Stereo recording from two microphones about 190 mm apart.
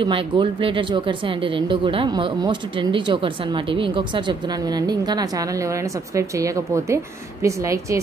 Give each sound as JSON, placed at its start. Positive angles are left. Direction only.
{"t": 0.0, "sound": "a woman's voice", "side_deg": -25}